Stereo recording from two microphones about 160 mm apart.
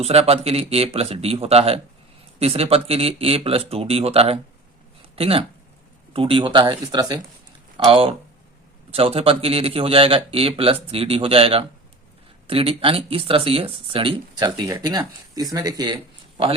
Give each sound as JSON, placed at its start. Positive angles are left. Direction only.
{"t": 0.0, "sound": "speech", "side_deg": -40}